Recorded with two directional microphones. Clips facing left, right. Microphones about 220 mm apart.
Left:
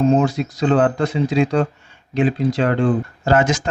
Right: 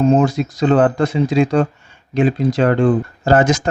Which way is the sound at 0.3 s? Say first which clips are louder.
Right 3 dB; 45° right (ahead or behind).